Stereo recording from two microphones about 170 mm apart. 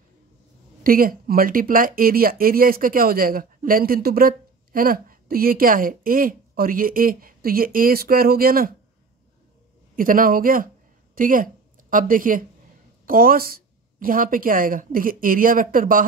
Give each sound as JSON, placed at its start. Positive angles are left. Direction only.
{"t": 0.8, "sound": "speech", "side_deg": -60}
{"t": 9.9, "sound": "speech", "side_deg": -55}